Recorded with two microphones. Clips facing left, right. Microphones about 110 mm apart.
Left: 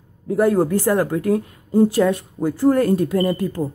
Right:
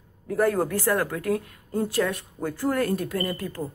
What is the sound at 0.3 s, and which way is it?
A woman's voice, 15° left (ahead or behind).